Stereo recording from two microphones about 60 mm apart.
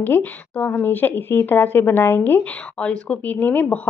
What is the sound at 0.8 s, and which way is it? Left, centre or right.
Speech, left.